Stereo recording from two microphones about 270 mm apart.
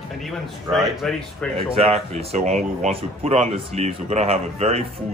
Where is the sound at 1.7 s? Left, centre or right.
Right.